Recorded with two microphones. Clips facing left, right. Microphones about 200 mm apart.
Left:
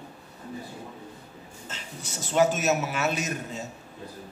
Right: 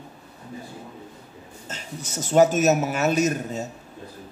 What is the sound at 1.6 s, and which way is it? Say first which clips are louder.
Speech: right 5 dB; 45° right (ahead or behind).